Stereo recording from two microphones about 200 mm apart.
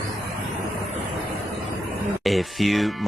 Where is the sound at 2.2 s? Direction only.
Centre (ahead or behind).